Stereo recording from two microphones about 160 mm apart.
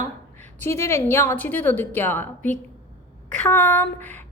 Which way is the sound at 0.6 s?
15° left (ahead or behind).